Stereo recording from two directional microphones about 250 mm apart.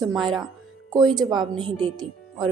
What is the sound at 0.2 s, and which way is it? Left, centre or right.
A woman's voice, centre.